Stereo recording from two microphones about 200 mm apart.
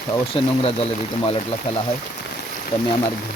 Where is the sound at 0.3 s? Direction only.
25° left (ahead or behind).